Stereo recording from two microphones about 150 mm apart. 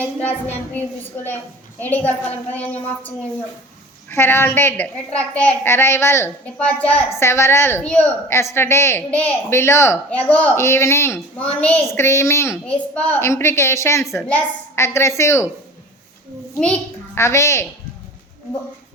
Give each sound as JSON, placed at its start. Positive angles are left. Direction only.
{"t": 0.0, "sound": "a woman's voice", "side_deg": 10}
{"t": 4.1, "sound": "a woman's voice", "side_deg": 15}
{"t": 16.6, "sound": "a woman's voice", "side_deg": 10}